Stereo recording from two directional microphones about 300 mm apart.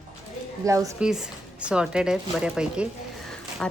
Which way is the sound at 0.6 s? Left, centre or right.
Centre.